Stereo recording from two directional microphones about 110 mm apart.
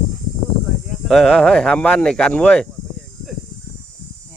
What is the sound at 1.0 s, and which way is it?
Speech, 5° left (ahead or behind).